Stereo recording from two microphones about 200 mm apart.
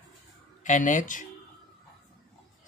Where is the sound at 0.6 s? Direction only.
40° left (ahead or behind).